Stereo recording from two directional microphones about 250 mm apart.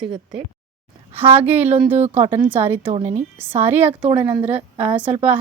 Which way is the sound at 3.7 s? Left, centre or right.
Centre.